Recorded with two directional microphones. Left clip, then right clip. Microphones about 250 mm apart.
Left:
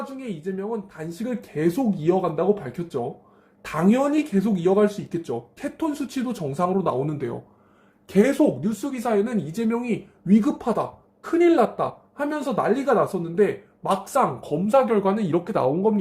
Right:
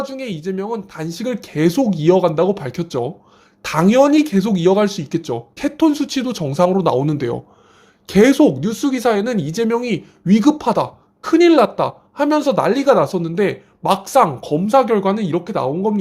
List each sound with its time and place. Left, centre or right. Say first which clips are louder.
0.0 s speech: right 7 dB; right; by 16.0 s centre